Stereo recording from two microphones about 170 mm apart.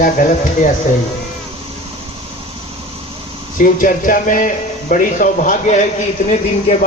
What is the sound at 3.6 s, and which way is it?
Speech, 55° left (ahead or behind).